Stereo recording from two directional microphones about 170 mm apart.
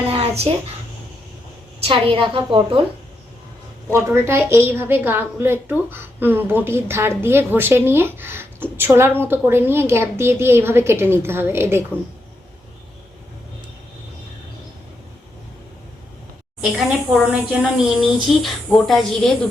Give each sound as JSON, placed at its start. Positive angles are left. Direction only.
{"t": 0.1, "sound": "a sound", "side_deg": -35}
{"t": 1.8, "sound": "a woman's voice", "side_deg": -30}
{"t": 3.8, "sound": "a woman's voice", "side_deg": -15}
{"t": 17.3, "sound": "a woman's voice", "side_deg": -5}